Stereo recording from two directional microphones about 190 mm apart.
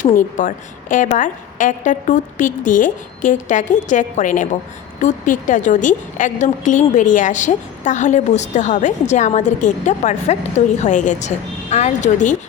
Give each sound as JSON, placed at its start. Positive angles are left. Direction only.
{"t": 0.0, "sound": "a woman's voice", "side_deg": 45}